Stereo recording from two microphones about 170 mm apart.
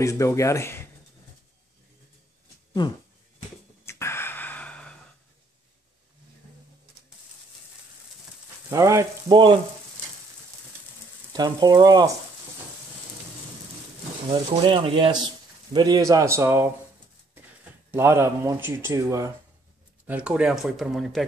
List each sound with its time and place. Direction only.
0.0 s speech: 20° left (ahead or behind)
3.8 s gasp: 15° left (ahead or behind)
8.6 s frying: 20° right (ahead or behind)
11.3 s frying: 25° right (ahead or behind)
14.3 s speech: 30° right (ahead or behind)
15.7 s frying: 25° right (ahead or behind)
17.9 s speech: 15° right (ahead or behind)
20.1 s speech: 5° right (ahead or behind)